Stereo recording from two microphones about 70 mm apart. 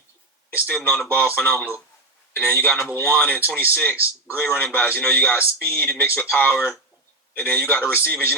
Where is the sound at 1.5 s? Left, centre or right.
Left.